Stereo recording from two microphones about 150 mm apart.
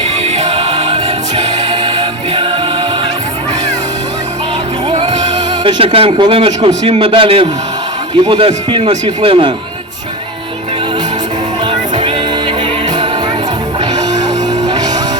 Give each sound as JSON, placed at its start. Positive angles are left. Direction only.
{"t": 0.3, "sound": "music", "side_deg": -45}
{"t": 1.7, "sound": "music", "side_deg": -30}
{"t": 4.9, "sound": "music", "side_deg": -30}
{"t": 6.8, "sound": "a man's voice", "side_deg": -35}
{"t": 14.1, "sound": "music", "side_deg": -25}